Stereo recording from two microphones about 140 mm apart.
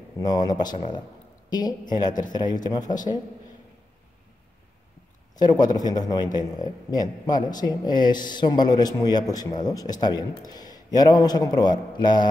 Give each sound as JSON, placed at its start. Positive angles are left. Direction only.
{"t": 0.2, "sound": "a man's voice", "side_deg": 30}
{"t": 5.4, "sound": "a man's voice", "side_deg": 30}